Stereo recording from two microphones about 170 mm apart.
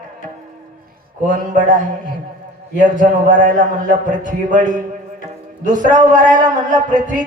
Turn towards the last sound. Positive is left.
turn(degrees=-50)  # may be behind; listen again after turning